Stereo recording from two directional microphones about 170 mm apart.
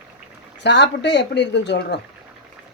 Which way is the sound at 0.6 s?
90° left.